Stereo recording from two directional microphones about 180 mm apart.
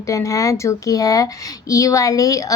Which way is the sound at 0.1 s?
20° left (ahead or behind).